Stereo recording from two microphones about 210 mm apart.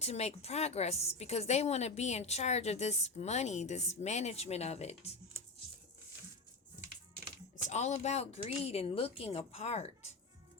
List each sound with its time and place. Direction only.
0.0 s a woman's voice: 30° left (ahead or behind)
7.7 s a woman's voice: 35° left (ahead or behind)